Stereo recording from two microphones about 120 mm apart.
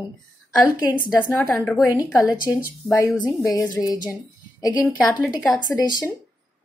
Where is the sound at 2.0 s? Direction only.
30° left (ahead or behind).